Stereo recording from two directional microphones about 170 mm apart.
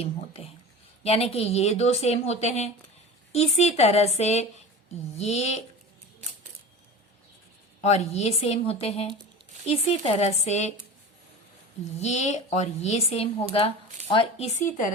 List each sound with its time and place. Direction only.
1.0 s speech: 35° left (ahead or behind)
7.8 s speech: 40° left (ahead or behind)
11.9 s speech: 40° left (ahead or behind)